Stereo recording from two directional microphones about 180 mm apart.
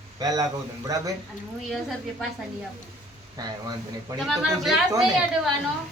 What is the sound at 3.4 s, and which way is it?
Speech, 20° right (ahead or behind).